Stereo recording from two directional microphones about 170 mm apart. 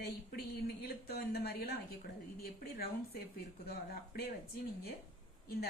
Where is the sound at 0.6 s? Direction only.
70° left (ahead or behind).